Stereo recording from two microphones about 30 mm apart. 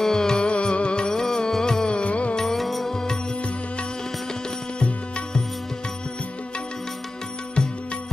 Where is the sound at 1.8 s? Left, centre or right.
Left.